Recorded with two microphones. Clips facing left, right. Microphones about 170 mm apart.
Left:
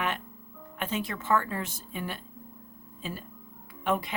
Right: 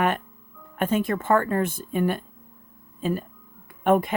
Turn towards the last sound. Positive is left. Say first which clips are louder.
# right 9 dB
turn(degrees=-50)  # may be behind; listen again after turning